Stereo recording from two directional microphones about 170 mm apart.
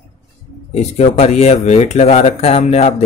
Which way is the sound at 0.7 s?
40° left (ahead or behind).